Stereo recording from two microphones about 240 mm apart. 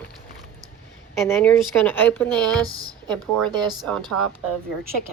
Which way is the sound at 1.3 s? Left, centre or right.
Centre.